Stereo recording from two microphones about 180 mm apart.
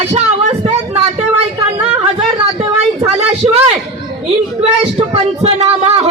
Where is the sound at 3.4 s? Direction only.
35° right (ahead or behind).